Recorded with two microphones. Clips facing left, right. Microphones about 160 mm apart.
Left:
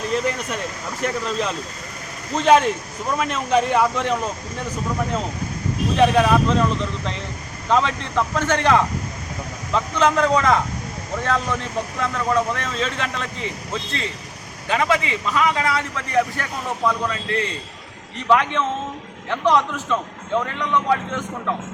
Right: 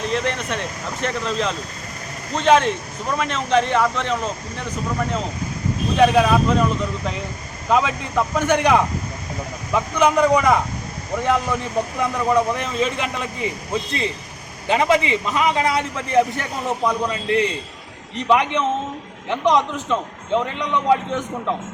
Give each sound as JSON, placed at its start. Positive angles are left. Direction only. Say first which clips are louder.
{"t": 0.2, "sound": "speech", "louder": "even", "side_deg": 5}
{"t": 6.0, "sound": "a man's voice", "louder": "right 1 dB", "side_deg": -5}